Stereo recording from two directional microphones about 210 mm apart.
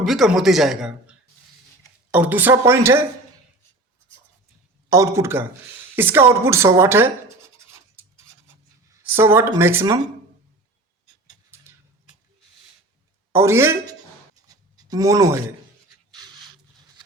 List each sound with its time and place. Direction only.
0.0 s speech: centre (ahead or behind)
2.1 s speech: 10° right (ahead or behind)
4.9 s speech: 15° right (ahead or behind)
8.9 s speech: 10° right (ahead or behind)
11.5 s a sound: 10° right (ahead or behind)
13.3 s speech: 10° right (ahead or behind)
14.4 s writing: 15° right (ahead or behind)